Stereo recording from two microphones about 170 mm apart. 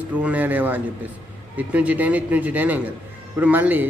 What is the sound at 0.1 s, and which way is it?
A man's voice, 10° right (ahead or behind).